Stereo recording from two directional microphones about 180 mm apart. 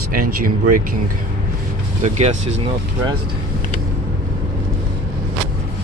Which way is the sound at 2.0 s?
40° right (ahead or behind).